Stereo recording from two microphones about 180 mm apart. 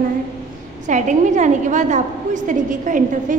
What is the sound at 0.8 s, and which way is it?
A woman's voice, 45° right (ahead or behind).